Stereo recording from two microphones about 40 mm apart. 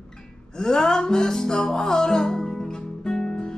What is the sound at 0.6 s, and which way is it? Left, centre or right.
Music, centre.